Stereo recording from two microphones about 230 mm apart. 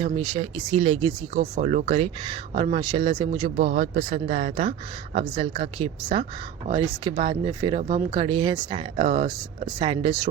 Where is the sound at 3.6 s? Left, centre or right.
Right.